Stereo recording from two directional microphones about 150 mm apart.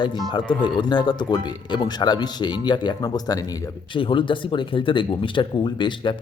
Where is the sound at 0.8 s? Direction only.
30° left (ahead or behind).